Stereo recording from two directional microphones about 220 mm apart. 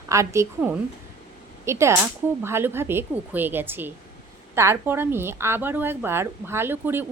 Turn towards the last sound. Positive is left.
turn(degrees=-10)  # may be behind; listen again after turning